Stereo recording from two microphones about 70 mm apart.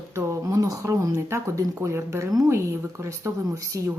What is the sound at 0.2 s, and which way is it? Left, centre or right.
Speech, right.